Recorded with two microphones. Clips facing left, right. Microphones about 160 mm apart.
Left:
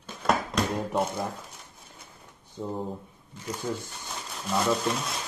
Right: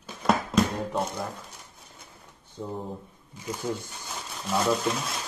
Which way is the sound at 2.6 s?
5° left (ahead or behind).